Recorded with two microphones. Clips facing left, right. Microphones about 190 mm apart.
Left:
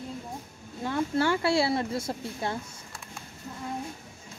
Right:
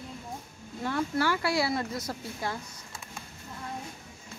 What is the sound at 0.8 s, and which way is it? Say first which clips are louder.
Speech: left 2 dB; 15° left (ahead or behind).